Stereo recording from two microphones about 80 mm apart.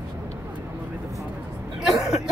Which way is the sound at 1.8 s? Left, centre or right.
Centre.